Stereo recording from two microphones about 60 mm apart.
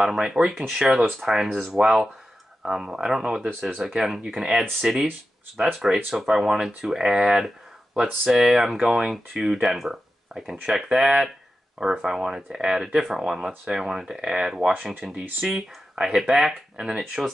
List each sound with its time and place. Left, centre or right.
0.0 s speech: centre
16.7 s speech: centre
17.0 s speech: centre